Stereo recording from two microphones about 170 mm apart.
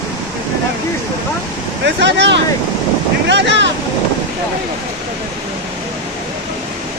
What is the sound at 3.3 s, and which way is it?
Boat, 90° right.